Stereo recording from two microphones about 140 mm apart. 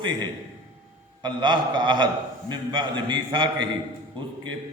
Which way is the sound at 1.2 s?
35° right (ahead or behind).